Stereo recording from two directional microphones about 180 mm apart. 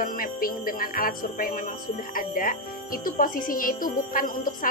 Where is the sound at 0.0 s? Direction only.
50° left (ahead or behind).